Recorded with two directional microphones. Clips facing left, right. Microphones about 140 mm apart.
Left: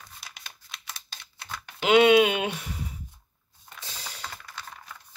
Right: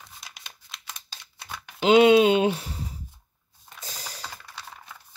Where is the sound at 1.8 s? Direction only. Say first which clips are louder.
Right 2 dB; 25° right (ahead or behind).